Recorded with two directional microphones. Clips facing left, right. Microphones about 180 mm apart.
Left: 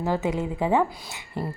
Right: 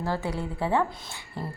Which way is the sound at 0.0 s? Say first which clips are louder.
Left 4 dB; 20° left (ahead or behind).